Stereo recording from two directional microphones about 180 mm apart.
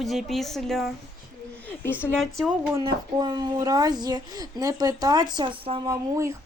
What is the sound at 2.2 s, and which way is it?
Speech, centre (ahead or behind).